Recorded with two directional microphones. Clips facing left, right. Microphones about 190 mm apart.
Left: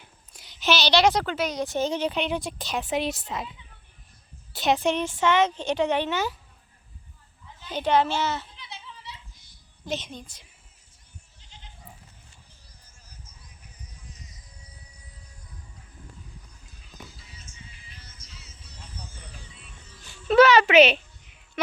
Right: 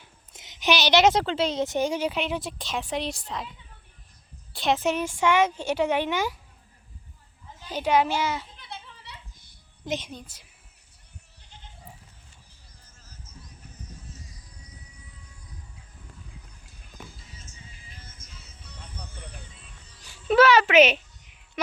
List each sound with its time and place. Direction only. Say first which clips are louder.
0.3 s a woman's voice: even; 20° right (ahead or behind); by 3.5 s 5° left (ahead or behind)
4.5 s a woman's voice: left 1 dB; centre (ahead or behind)
7.7 s a woman's voice: even; 10° right (ahead or behind)
8.5 s giggle: right 1 dB; 55° right (ahead or behind)
9.8 s a woman's voice: right 1 dB; 15° right (ahead or behind)
13.7 s music: right 4 dB; 15° left (ahead or behind)
17.4 s music: even; 40° right (ahead or behind); by 19.4 s 60° right (ahead or behind)
20.2 s a sound: left 2 dB; 5° right (ahead or behind)